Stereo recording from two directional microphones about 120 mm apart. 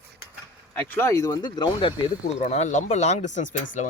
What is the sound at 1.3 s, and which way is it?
Speech, 40° left (ahead or behind).